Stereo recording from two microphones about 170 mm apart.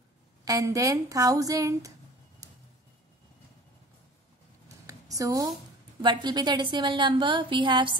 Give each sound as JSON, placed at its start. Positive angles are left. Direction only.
{"t": 0.5, "sound": "a woman's voice", "side_deg": -20}
{"t": 4.6, "sound": "a sound", "side_deg": -20}
{"t": 5.9, "sound": "a woman's voice", "side_deg": -25}